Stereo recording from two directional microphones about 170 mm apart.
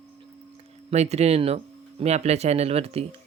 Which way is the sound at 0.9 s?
40° right (ahead or behind).